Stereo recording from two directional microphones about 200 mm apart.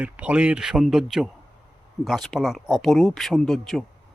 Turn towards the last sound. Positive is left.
turn(degrees=0)  # may be behind; listen again after turning